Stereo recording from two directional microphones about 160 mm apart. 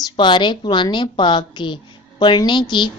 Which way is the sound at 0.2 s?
30° left (ahead or behind).